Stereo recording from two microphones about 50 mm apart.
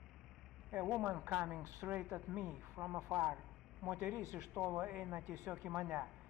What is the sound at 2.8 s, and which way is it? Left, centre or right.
Speech, right.